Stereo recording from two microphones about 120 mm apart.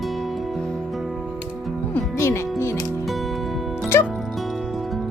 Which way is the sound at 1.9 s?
20° left (ahead or behind).